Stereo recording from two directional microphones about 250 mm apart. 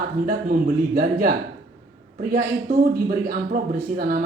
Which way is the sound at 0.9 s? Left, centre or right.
Right.